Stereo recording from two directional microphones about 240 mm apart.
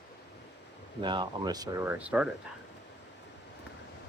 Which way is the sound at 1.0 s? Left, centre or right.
Centre.